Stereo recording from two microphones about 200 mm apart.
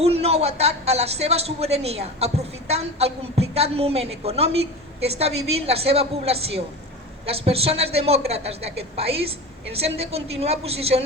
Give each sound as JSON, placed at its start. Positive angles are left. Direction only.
{"t": 0.0, "sound": "a man's voice", "side_deg": -30}